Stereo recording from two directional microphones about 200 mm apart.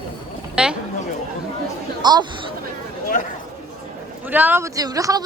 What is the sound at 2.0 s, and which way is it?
Speech, 20° right (ahead or behind).